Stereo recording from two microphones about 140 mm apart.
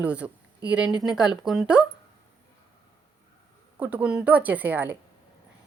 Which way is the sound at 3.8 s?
10° right (ahead or behind).